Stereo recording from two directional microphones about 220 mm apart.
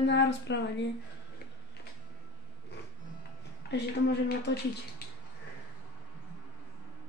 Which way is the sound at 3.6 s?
45° left (ahead or behind).